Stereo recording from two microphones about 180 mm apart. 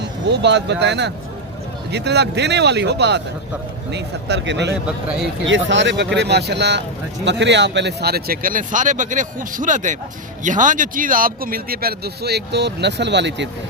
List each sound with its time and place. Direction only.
0.3 s speech: 75° right (ahead or behind)
5.5 s speech: 90° right; by 13.5 s 75° right (ahead or behind)